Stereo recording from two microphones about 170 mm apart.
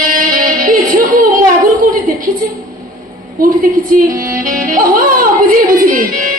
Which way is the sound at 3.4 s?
55° right (ahead or behind).